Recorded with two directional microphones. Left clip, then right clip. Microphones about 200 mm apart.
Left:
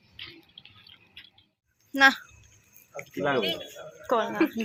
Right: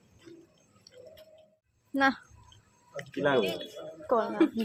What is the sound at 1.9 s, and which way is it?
Speech, 15° right (ahead or behind).